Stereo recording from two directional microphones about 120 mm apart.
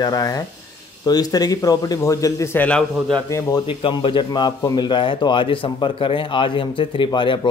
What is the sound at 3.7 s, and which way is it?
A man's voice, 45° left (ahead or behind).